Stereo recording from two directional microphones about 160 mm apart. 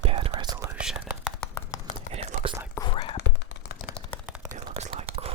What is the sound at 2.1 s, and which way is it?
Whispering, 40° right (ahead or behind).